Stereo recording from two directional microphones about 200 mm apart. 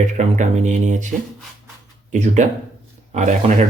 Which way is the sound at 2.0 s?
35° right (ahead or behind).